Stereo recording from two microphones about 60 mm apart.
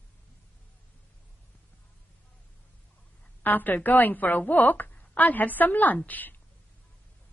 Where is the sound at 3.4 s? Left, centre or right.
Left.